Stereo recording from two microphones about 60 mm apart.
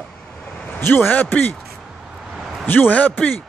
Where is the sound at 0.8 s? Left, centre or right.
Left.